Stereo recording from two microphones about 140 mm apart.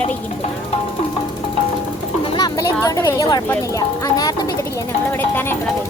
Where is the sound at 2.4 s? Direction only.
25° left (ahead or behind).